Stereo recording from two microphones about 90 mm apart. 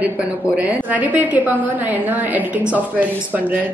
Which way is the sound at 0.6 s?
15° right (ahead or behind).